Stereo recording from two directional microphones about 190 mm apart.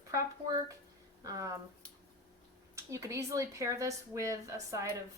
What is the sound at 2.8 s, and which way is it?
Speech, 15° right (ahead or behind).